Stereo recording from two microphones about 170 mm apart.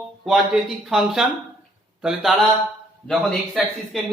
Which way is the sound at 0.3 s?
Centre (ahead or behind).